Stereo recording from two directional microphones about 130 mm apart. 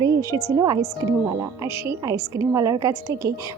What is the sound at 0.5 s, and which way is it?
Speech, 30° right (ahead or behind).